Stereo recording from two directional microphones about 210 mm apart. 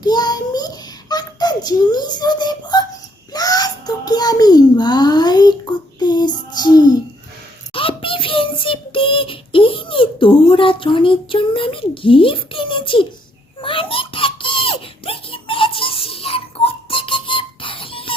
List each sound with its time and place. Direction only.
0.0 s child singing: 20° left (ahead or behind)
3.3 s a sound: 20° left (ahead or behind)
6.0 s child singing: 20° left (ahead or behind)
13.6 s baby laughter: 25° left (ahead or behind)